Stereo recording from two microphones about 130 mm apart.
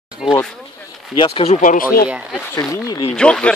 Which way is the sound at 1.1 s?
40° left (ahead or behind).